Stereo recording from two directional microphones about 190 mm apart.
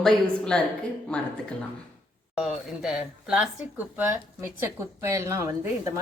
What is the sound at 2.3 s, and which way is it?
Speech, 5° right (ahead or behind).